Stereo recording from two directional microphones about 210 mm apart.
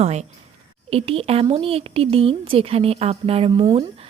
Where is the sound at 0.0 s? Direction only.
30° right (ahead or behind).